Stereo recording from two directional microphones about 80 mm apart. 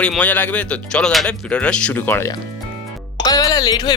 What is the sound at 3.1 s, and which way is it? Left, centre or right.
Speech, left.